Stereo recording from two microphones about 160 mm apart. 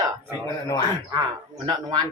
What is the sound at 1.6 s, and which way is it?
Speech, 25° right (ahead or behind).